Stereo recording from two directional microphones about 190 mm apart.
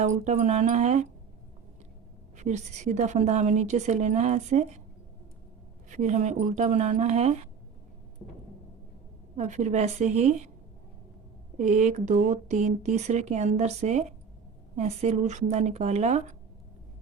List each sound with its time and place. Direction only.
0.0 s speech: 35° right (ahead or behind)
2.4 s speech: 40° right (ahead or behind)
5.9 s speech: 40° right (ahead or behind)
9.3 s speech: 40° right (ahead or behind)
11.5 s speech: 40° right (ahead or behind)